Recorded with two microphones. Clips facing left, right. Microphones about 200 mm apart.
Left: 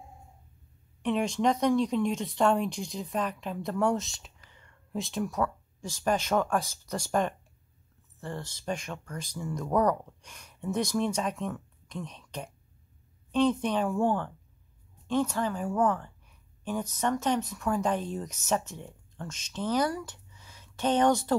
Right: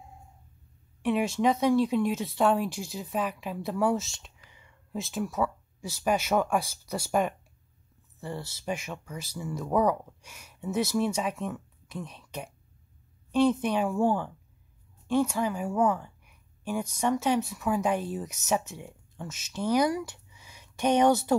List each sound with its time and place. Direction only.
1.0 s a woman's voice: 5° right (ahead or behind)